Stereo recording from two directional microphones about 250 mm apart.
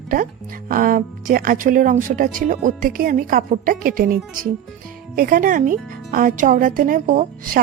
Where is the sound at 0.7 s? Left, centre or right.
Right.